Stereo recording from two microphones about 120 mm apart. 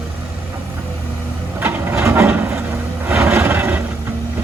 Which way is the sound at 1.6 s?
15° right (ahead or behind).